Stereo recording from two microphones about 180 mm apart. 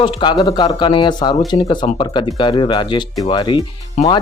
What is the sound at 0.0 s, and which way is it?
Speech, 25° left (ahead or behind).